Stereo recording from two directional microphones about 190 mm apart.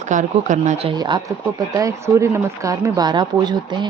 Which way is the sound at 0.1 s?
40° right (ahead or behind).